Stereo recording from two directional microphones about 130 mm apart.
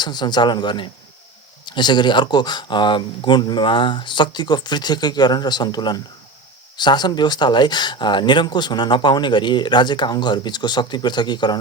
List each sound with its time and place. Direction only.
0.0 s speech: 35° left (ahead or behind)